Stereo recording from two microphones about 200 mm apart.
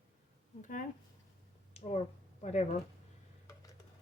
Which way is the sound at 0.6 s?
40° left (ahead or behind).